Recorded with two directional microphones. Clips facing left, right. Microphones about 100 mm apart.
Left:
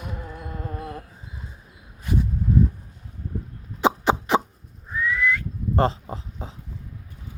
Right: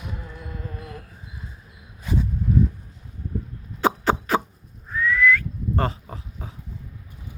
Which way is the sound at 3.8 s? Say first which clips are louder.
Left 1 dB; 15° left (ahead or behind).